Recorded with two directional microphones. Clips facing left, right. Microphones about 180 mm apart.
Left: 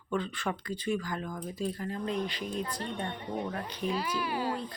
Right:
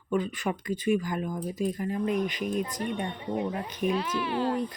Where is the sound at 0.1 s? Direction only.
15° right (ahead or behind).